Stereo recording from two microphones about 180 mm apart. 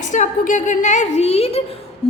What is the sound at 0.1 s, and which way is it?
A woman's voice, 45° left (ahead or behind).